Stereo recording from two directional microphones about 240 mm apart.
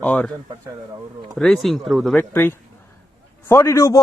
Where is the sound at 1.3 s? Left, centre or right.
Centre.